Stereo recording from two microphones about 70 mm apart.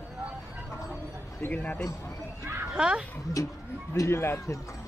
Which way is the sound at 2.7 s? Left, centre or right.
Centre.